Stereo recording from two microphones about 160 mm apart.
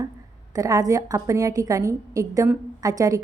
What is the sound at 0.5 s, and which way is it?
A woman's voice, 20° right (ahead or behind).